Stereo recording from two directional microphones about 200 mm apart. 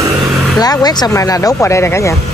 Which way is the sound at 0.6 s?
20° left (ahead or behind).